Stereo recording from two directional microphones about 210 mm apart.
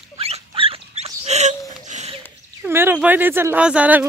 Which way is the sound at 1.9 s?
35° right (ahead or behind).